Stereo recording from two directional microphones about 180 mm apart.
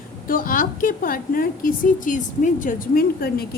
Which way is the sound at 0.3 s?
50° left (ahead or behind).